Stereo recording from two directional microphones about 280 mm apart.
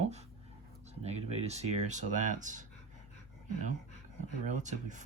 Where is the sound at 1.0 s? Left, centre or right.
Right.